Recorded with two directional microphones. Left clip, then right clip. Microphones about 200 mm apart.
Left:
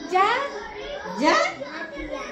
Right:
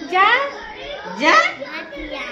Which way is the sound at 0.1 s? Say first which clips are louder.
Right 6 dB; 45° right (ahead or behind).